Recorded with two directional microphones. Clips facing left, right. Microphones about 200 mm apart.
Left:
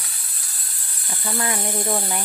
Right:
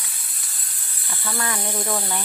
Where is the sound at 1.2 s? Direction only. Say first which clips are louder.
Left 2 dB; 20° left (ahead or behind).